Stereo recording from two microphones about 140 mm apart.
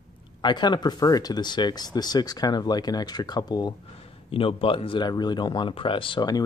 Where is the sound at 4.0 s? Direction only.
40° left (ahead or behind).